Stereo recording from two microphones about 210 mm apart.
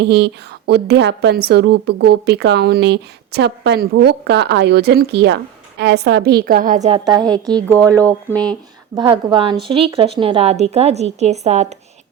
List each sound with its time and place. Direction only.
0.0 s speech: 50° right (ahead or behind); by 7.0 s 35° right (ahead or behind)
7.5 s speech: 5° left (ahead or behind)
9.0 s speech: 25° right (ahead or behind)